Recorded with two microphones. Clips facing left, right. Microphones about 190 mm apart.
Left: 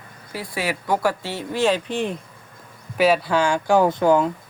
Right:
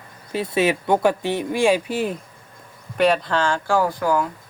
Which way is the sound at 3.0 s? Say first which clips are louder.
Left 1 dB; 5° left (ahead or behind).